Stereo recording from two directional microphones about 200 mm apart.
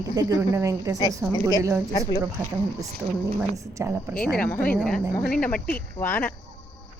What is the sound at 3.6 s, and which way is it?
Speech, 15° right (ahead or behind).